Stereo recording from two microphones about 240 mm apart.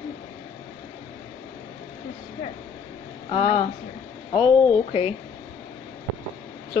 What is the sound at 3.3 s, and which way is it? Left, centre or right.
Speech, left.